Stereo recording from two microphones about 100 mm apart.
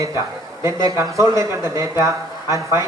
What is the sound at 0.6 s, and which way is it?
Speech, 30° right (ahead or behind).